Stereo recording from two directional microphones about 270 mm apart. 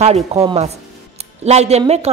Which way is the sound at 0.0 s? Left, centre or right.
Right.